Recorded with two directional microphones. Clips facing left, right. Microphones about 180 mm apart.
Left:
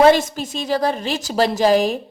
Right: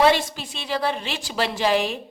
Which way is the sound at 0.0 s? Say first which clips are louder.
Left 6 dB; 45° left (ahead or behind).